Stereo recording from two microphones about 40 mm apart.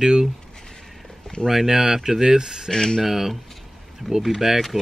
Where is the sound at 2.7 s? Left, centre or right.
Centre.